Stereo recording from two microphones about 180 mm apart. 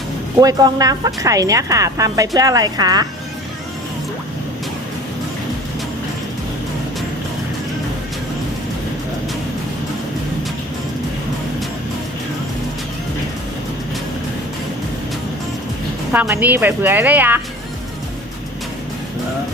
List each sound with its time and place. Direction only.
0.3 s speech: 20° right (ahead or behind)
16.1 s a woman's voice: 10° right (ahead or behind)